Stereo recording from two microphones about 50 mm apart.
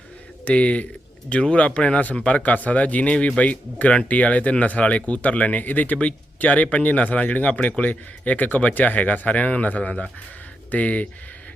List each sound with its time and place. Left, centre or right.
0.4 s speech: left